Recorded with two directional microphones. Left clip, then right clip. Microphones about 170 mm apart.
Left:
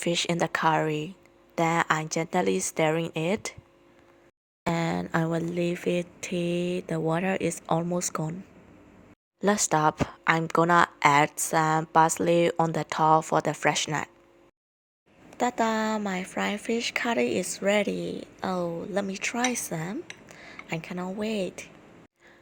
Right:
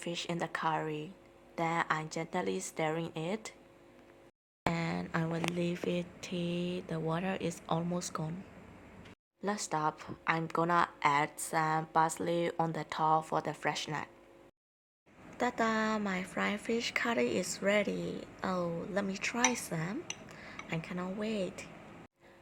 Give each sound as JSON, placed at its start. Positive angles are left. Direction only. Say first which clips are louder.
{"t": 0.0, "sound": "speech", "louder": "left 11 dB", "side_deg": 45}
{"t": 4.7, "sound": "a sound", "louder": "left 13 dB", "side_deg": 40}
{"t": 5.5, "sound": "speech", "louder": "left 8 dB", "side_deg": 30}
{"t": 9.4, "sound": "speech", "louder": "left 10 dB", "side_deg": 45}
{"t": 15.4, "sound": "speech", "louder": "left 6 dB", "side_deg": 30}